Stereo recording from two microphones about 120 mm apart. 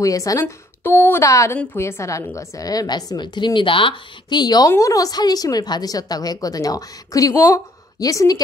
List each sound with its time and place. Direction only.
0.0 s a woman's voice: 30° left (ahead or behind)